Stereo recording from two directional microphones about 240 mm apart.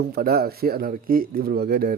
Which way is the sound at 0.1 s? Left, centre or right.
Right.